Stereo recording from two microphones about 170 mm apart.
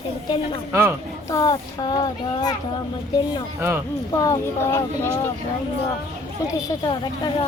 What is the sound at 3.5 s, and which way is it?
Speech, 15° right (ahead or behind).